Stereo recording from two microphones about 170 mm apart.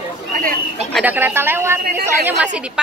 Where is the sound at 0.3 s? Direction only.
55° right (ahead or behind).